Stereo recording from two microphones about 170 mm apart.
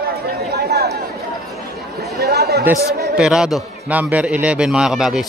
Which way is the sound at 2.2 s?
70° right (ahead or behind).